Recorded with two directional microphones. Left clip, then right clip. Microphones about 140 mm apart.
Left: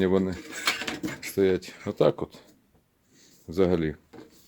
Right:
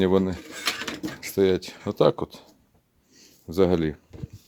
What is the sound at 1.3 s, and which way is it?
Speech, 30° right (ahead or behind).